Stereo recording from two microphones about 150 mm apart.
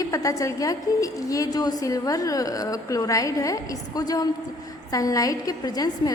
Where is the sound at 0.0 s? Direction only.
20° left (ahead or behind).